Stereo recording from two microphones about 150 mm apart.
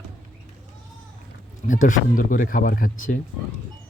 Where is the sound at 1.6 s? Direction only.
60° left (ahead or behind).